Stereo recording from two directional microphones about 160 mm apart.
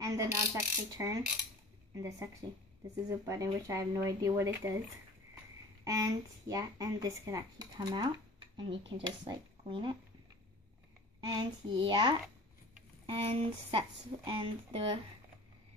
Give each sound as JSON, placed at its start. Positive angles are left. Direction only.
{"t": 0.0, "sound": "mechanisms", "side_deg": -20}
{"t": 0.9, "sound": "speech", "side_deg": -20}
{"t": 5.9, "sound": "speech", "side_deg": -20}
{"t": 11.1, "sound": "speech", "side_deg": -30}